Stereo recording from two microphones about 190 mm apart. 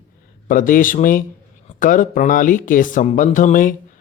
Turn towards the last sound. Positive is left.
turn(degrees=45)  # may be behind; listen again after turning